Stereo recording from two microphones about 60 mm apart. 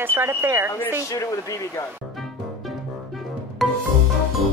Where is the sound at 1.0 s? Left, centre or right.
Left.